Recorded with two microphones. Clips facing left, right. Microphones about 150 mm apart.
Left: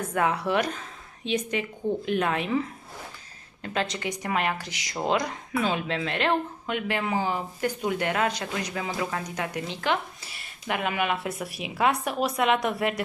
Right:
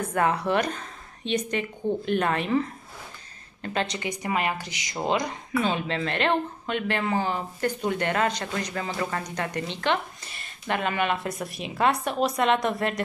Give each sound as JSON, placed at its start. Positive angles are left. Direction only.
{"t": 0.1, "sound": "a woman's voice", "side_deg": 0}
{"t": 3.6, "sound": "speech", "side_deg": 5}